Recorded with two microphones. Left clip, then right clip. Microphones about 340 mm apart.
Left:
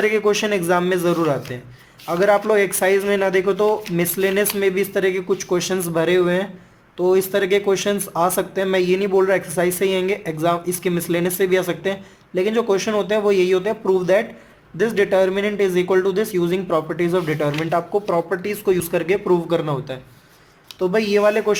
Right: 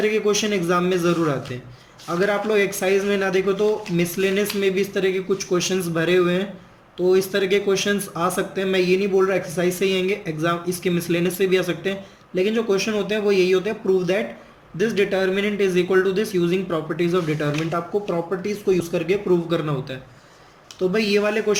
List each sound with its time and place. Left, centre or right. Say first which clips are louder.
0.0 s a man's voice: left 2 dB; left